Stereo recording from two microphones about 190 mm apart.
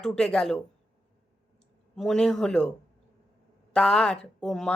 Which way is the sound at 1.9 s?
5° left (ahead or behind).